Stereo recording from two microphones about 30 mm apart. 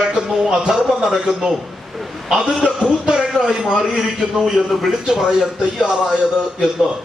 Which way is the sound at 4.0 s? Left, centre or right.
Centre.